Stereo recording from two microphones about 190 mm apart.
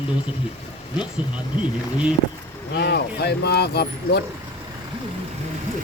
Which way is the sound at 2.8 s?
60° left (ahead or behind).